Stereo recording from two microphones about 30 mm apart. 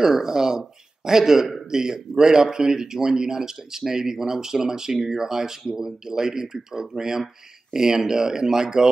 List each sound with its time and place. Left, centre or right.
0.0 s speech: centre